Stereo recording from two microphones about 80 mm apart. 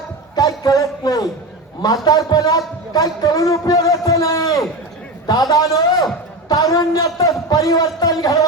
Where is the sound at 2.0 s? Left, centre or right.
Left.